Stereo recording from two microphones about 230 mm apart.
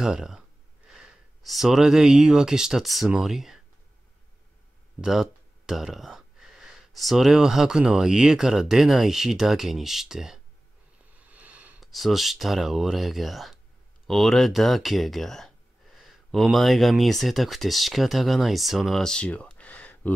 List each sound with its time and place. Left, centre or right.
0.0 s speech: centre
5.0 s speech: centre